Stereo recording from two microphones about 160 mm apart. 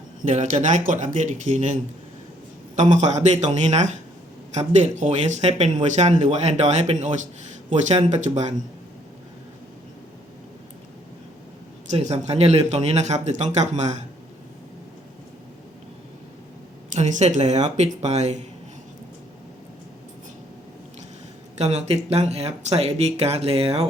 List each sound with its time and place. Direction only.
0.2 s speech: 50° right (ahead or behind)
12.1 s speech: 45° right (ahead or behind)
16.9 s speech: 50° right (ahead or behind)
21.6 s speech: 40° right (ahead or behind)